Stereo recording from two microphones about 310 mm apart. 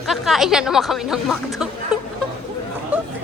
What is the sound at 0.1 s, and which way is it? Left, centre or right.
Speech, centre.